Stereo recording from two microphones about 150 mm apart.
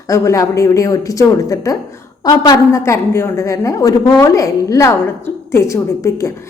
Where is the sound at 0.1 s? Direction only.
20° left (ahead or behind).